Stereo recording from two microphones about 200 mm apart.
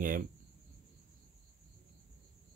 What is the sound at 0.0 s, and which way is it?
Speech, 45° right (ahead or behind).